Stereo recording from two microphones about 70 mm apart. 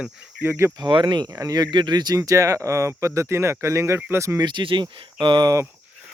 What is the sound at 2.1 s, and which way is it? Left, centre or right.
Speech, right.